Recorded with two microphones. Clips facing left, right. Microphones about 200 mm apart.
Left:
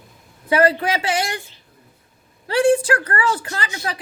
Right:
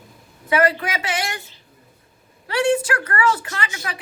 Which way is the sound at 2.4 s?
30° left (ahead or behind).